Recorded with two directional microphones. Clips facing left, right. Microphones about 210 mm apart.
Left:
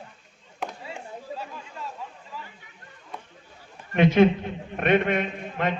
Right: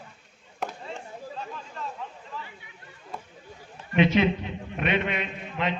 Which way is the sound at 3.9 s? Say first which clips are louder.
Left 3 dB; 50° left (ahead or behind).